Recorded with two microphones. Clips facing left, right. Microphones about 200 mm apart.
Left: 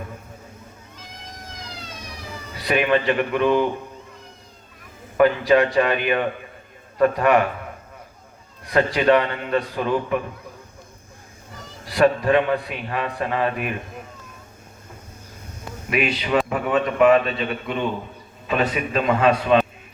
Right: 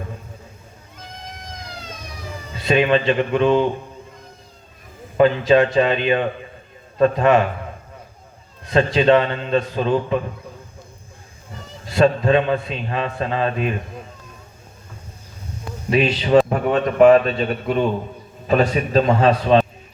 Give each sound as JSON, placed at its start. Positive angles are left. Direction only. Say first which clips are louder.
{"t": 2.6, "sound": "a man's voice", "louder": "right 3 dB", "side_deg": -25}
{"t": 5.1, "sound": "a man's voice", "louder": "right 2 dB", "side_deg": -25}
{"t": 8.6, "sound": "a man's voice", "louder": "right 2 dB", "side_deg": -25}
{"t": 11.9, "sound": "a man's voice", "louder": "right 2 dB", "side_deg": -25}
{"t": 15.9, "sound": "a man's voice", "louder": "right 5 dB", "side_deg": -30}
{"t": 16.5, "sound": "a man's voice", "louder": "right 2 dB", "side_deg": -40}